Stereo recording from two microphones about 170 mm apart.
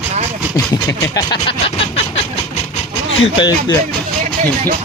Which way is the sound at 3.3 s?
25° left (ahead or behind).